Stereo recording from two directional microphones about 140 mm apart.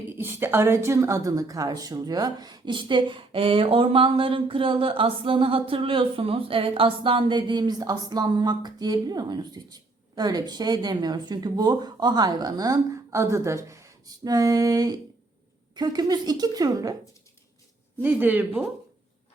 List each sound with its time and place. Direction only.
0.2 s a woman's voice: 15° right (ahead or behind)
18.0 s speech: 15° right (ahead or behind)